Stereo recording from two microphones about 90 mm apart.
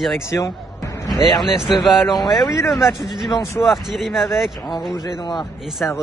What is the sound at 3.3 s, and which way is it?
Speech, 35° left (ahead or behind).